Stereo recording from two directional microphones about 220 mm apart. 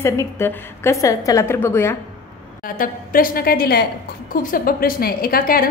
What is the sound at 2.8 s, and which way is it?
A woman's voice, 40° left (ahead or behind).